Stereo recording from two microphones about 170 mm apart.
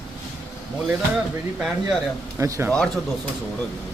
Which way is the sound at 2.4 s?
15° right (ahead or behind).